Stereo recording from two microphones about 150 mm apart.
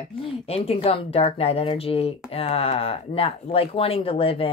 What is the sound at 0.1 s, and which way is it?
Speech, 40° left (ahead or behind).